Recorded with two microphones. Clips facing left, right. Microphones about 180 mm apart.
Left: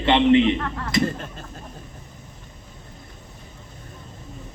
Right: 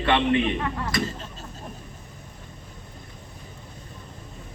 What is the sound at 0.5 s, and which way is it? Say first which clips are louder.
Speech: even; 15° right (ahead or behind).